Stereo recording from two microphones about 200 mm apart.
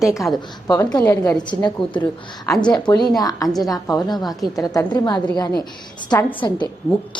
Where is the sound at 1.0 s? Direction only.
15° left (ahead or behind).